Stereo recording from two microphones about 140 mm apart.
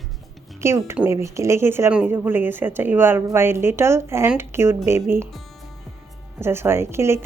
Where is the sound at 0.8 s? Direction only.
15° right (ahead or behind).